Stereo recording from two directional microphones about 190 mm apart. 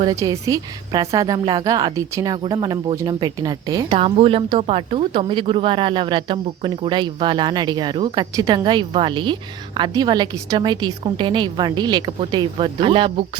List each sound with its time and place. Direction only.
0.0 s a woman's voice: 20° right (ahead or behind)